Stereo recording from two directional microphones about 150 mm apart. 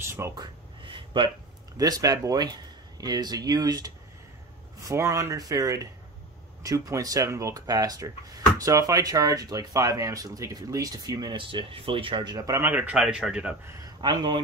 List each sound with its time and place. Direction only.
0.1 s speech: 15° right (ahead or behind)
0.8 s a sound: 35° right (ahead or behind)
1.8 s speech: 25° right (ahead or behind); by 13.6 s 5° right (ahead or behind)
14.0 s speech: 30° right (ahead or behind)